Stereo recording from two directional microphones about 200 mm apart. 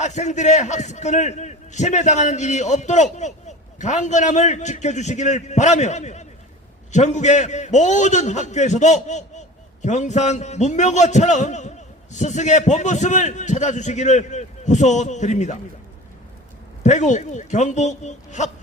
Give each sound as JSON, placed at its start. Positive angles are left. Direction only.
{"t": 0.0, "sound": "a man's voice", "side_deg": 35}
{"t": 16.8, "sound": "a man's voice", "side_deg": 35}